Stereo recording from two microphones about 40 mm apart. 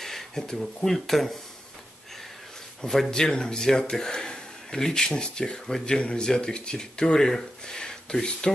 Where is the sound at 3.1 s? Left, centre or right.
Centre.